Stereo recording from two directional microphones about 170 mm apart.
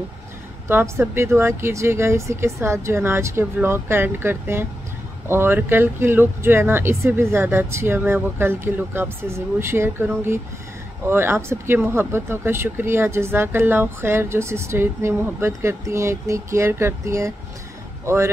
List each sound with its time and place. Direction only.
0.7 s speech: 15° right (ahead or behind)